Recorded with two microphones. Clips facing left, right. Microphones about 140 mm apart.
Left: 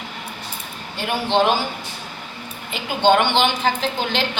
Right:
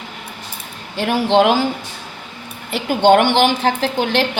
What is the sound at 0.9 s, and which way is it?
Speech, 85° right.